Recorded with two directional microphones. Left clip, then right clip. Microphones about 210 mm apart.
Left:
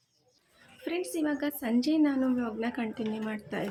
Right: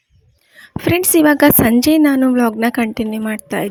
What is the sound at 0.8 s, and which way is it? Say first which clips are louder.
A woman's voice: right 19 dB; 55° right (ahead or behind).